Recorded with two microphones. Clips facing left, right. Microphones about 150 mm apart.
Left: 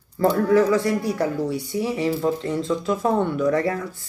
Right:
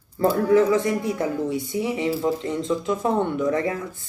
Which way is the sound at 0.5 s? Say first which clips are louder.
Right 1 dB; 20° right (ahead or behind).